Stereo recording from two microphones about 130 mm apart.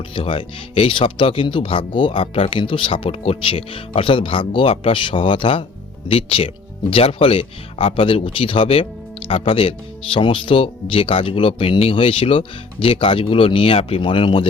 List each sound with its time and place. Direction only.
0.1 s speech: 45° left (ahead or behind)